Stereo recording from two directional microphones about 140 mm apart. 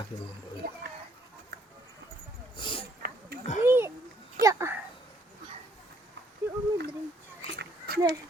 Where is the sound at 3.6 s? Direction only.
15° right (ahead or behind).